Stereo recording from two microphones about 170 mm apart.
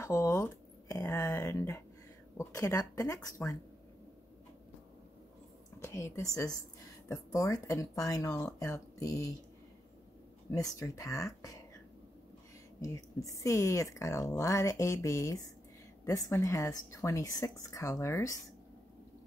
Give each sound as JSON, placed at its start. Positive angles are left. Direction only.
{"t": 0.0, "sound": "speech", "side_deg": 15}
{"t": 5.8, "sound": "a woman's voice", "side_deg": 15}
{"t": 10.5, "sound": "speech", "side_deg": 20}
{"t": 12.8, "sound": "speech", "side_deg": 20}